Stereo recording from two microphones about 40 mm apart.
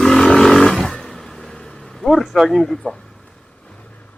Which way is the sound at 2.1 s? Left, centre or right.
Centre.